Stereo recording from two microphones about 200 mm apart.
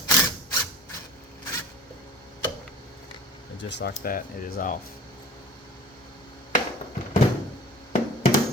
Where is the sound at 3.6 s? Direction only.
55° left (ahead or behind).